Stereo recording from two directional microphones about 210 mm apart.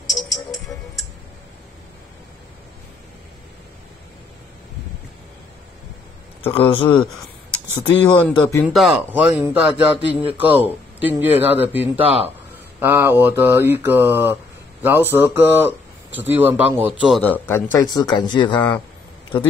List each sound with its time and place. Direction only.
0.1 s music: centre (ahead or behind)
6.4 s speech: 25° left (ahead or behind)
7.8 s speech: 10° left (ahead or behind)
8.6 s mantra: 5° right (ahead or behind)
17.2 s speech: 10° left (ahead or behind)